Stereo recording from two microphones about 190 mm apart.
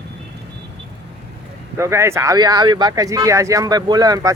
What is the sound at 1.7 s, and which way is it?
Speech, 15° right (ahead or behind).